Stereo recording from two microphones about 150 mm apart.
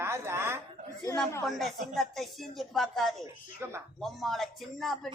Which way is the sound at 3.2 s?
15° right (ahead or behind).